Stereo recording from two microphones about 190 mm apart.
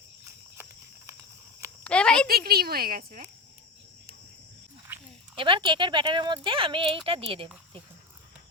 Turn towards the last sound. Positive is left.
turn(degrees=-30)  # may be behind; listen again after turning